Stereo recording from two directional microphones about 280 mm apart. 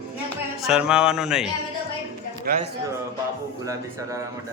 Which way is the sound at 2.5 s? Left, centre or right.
Right.